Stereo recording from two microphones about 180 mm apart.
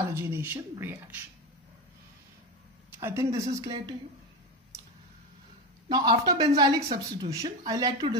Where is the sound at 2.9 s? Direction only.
15° right (ahead or behind).